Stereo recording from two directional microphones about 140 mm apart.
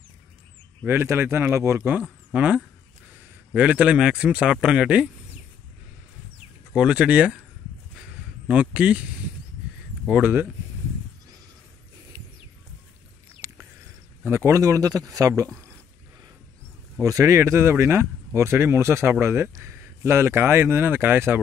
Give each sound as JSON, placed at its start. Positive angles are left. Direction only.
{"t": 0.8, "sound": "speech", "side_deg": -15}
{"t": 6.7, "sound": "speech", "side_deg": -5}
{"t": 8.5, "sound": "speech", "side_deg": -10}
{"t": 10.0, "sound": "speech", "side_deg": -10}
{"t": 14.2, "sound": "speech", "side_deg": -20}
{"t": 17.0, "sound": "speech", "side_deg": -20}